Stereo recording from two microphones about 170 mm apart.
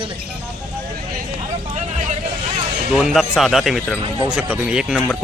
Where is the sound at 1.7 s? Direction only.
45° right (ahead or behind).